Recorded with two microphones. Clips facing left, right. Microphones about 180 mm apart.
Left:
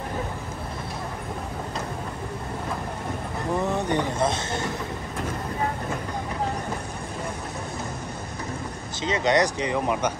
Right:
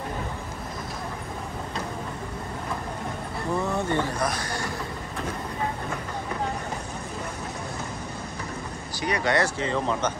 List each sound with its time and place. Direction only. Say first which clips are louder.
3.5 s speech: left 1 dB; 20° left (ahead or behind)
9.0 s speech: left 3 dB; 20° left (ahead or behind)